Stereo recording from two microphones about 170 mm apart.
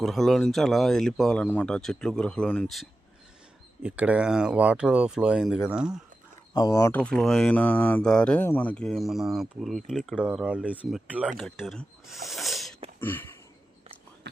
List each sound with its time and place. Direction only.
0.0 s speech: centre (ahead or behind)
3.8 s speech: 5° right (ahead or behind)
6.5 s speech: 25° left (ahead or behind)
6.9 s speech: 5° left (ahead or behind)
13.0 s a sound: 15° left (ahead or behind)